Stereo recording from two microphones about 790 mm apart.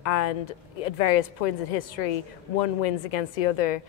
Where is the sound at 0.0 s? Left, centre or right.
Left.